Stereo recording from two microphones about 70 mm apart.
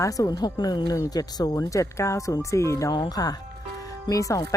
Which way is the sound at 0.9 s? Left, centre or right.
Left.